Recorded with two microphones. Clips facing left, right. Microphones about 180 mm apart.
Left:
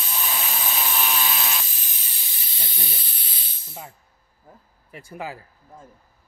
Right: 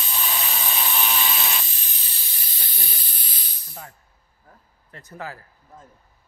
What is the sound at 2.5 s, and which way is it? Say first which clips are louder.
Snake: left 4 dB; 25° left (ahead or behind).